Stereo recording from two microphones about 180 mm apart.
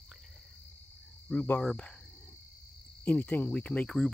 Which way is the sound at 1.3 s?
10° left (ahead or behind).